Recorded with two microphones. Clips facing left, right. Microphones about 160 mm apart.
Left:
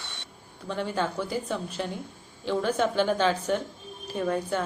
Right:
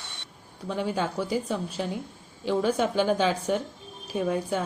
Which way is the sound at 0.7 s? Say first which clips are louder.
Right 1 dB; 10° right (ahead or behind).